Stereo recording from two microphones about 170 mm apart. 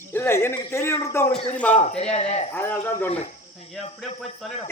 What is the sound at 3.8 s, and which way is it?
Cricket, 35° left (ahead or behind).